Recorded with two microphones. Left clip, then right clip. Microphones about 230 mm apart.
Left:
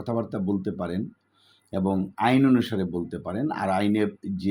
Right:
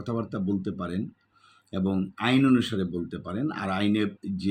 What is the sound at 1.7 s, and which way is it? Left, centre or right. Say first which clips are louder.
Speech: left 3 dB; centre.